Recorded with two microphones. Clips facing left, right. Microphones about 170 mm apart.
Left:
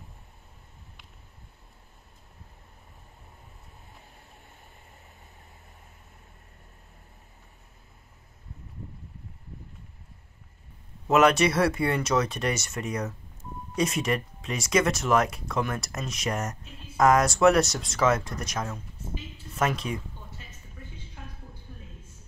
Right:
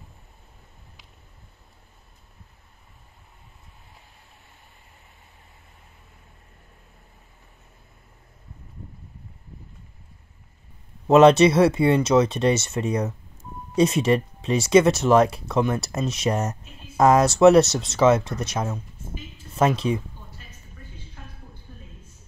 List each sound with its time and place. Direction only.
11.1 s speech: 25° right (ahead or behind)